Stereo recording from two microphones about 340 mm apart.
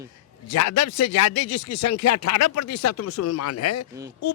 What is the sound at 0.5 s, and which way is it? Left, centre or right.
Speech, left.